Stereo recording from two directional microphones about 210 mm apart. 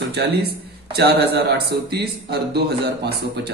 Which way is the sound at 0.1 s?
50° right (ahead or behind).